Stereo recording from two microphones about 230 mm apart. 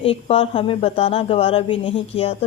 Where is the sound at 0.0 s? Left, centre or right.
Left.